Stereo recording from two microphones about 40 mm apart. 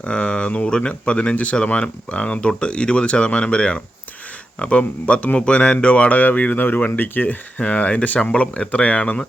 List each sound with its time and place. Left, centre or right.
0.0 s speech: left
6.6 s speech: left
7.6 s speech: left